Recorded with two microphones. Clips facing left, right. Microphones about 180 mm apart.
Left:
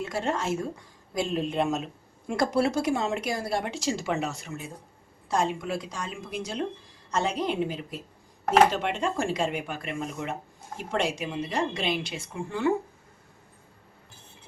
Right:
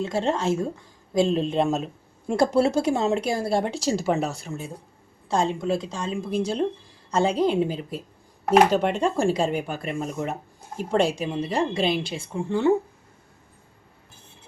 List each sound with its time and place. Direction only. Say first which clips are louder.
0.0 s a woman's voice: right 5 dB; 25° right (ahead or behind)